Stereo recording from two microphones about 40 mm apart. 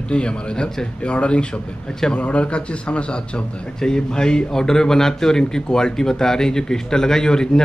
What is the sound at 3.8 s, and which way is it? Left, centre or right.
A man's voice, centre.